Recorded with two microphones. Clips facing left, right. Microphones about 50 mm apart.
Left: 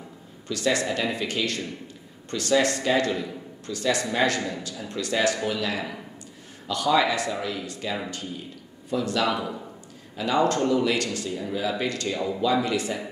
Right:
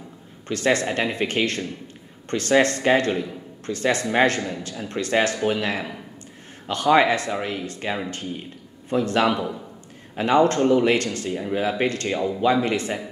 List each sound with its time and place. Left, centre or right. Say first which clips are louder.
0.5 s a man's voice: right 3 dB; right